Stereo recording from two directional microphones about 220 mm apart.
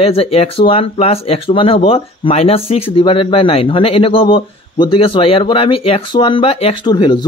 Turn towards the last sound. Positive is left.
turn(degrees=20)  # may be behind; listen again after turning